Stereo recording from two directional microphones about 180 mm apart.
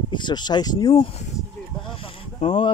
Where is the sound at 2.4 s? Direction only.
30° left (ahead or behind).